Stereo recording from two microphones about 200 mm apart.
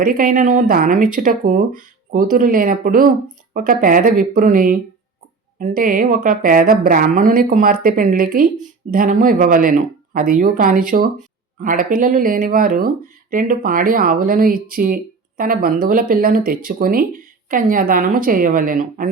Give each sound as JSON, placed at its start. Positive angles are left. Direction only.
{"t": 0.0, "sound": "speech", "side_deg": -45}